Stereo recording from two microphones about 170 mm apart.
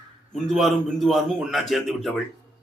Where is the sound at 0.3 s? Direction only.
Centre (ahead or behind).